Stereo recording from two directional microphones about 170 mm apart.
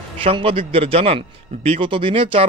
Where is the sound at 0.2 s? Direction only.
35° right (ahead or behind).